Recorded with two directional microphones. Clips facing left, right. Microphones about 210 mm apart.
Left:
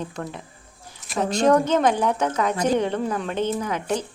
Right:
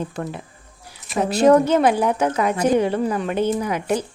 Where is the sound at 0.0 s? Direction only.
5° right (ahead or behind).